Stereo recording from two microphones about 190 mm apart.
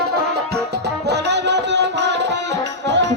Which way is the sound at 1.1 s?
65° right (ahead or behind).